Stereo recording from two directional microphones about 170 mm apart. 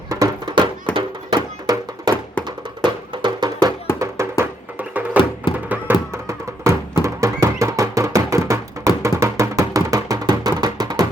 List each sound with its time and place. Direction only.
0.1 s horse: 20° right (ahead or behind)
0.9 s music: 25° right (ahead or behind)
7.0 s a sound: 15° right (ahead or behind)
9.0 s music: 15° right (ahead or behind)